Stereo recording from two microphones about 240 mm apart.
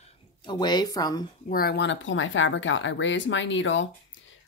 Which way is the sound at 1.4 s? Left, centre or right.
Left.